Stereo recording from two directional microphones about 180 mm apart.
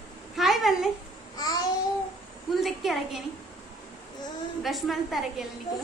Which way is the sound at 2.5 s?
Centre (ahead or behind).